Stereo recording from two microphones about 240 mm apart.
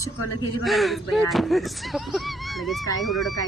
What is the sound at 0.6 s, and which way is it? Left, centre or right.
Speech, centre.